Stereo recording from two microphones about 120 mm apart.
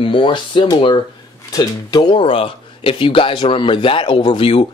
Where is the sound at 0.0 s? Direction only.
45° left (ahead or behind).